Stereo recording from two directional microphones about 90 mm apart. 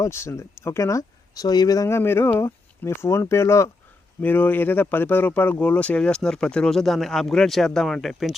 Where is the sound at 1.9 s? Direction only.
25° left (ahead or behind).